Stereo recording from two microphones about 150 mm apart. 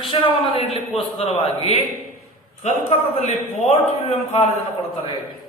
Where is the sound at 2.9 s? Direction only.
45° left (ahead or behind).